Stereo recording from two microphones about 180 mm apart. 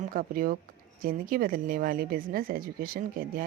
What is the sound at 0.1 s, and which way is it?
Speech, 50° right (ahead or behind).